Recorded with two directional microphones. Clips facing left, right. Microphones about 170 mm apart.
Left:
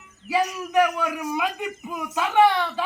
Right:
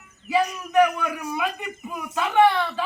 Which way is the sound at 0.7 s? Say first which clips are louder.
Right 2 dB; 10° left (ahead or behind).